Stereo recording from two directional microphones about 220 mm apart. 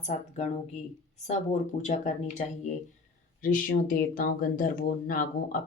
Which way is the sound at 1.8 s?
35° left (ahead or behind).